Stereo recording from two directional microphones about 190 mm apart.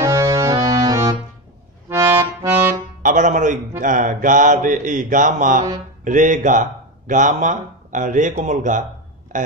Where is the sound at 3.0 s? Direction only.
45° right (ahead or behind).